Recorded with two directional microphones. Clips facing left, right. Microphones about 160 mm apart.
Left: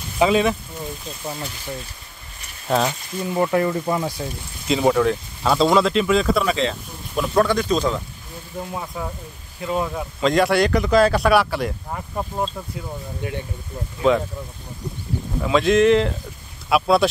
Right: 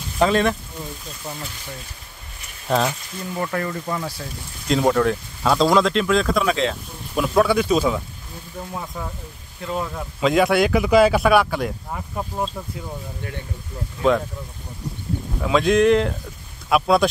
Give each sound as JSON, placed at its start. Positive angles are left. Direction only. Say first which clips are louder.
{"t": 0.2, "sound": "speech", "louder": "left 1 dB", "side_deg": 5}
{"t": 2.7, "sound": "speech", "louder": "even", "side_deg": 0}
{"t": 3.3, "sound": "speech", "louder": "left 6 dB", "side_deg": 20}
{"t": 4.6, "sound": "speech", "louder": "left 1 dB", "side_deg": 5}
{"t": 8.5, "sound": "speech", "louder": "left 2 dB", "side_deg": 5}
{"t": 13.2, "sound": "speech", "louder": "left 7 dB", "side_deg": 15}
{"t": 14.1, "sound": "speech", "louder": "left 1 dB", "side_deg": 0}
{"t": 15.4, "sound": "speech", "louder": "even", "side_deg": 0}